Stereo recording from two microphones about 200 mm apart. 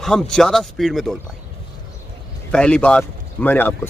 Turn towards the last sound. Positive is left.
turn(degrees=10)  # may be behind; listen again after turning